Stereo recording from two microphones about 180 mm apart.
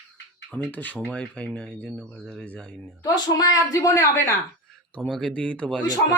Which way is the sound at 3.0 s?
20° left (ahead or behind).